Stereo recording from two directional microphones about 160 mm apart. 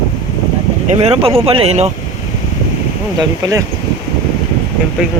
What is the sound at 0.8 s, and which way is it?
Speech, 40° right (ahead or behind).